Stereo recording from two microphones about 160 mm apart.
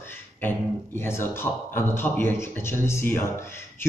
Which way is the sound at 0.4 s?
15° left (ahead or behind).